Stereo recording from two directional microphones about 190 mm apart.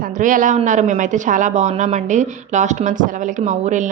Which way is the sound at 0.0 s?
45° right (ahead or behind).